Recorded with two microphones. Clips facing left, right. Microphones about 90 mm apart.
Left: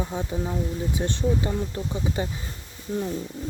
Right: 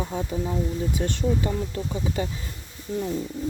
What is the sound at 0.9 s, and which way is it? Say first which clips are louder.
Speech: left 2 dB; 20° left (ahead or behind).